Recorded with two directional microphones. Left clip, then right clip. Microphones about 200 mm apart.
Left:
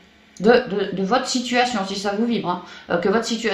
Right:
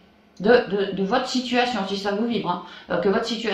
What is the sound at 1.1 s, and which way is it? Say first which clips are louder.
A woman's voice: left 2 dB; 45° left (ahead or behind).